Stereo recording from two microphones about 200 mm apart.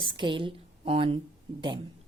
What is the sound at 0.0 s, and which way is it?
A woman's voice, 25° right (ahead or behind).